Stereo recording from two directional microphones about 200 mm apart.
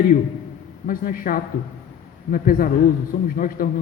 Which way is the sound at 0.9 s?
45° left (ahead or behind).